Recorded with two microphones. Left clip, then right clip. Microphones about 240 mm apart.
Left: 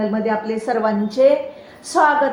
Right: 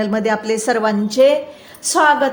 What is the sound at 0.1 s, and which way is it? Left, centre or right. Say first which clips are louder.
A woman's voice: right 3 dB; right.